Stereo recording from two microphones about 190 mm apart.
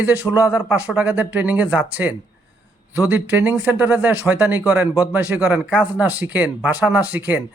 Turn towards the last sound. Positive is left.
turn(degrees=-10)  # may be behind; listen again after turning